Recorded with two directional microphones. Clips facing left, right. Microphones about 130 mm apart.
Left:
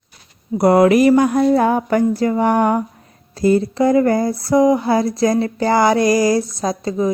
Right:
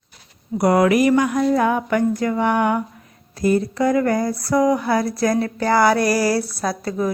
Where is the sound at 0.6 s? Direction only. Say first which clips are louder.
Left 4 dB; 30° left (ahead or behind).